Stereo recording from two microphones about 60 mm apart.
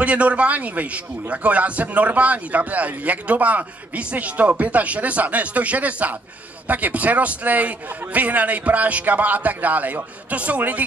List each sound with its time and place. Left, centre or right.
0.0 s a man's voice: right